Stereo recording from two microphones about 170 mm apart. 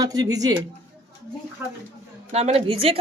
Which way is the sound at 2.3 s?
40° right (ahead or behind).